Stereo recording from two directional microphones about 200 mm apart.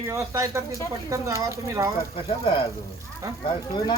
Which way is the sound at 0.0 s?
15° right (ahead or behind).